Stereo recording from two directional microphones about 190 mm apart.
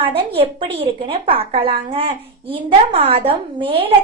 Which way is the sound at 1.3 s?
30° right (ahead or behind).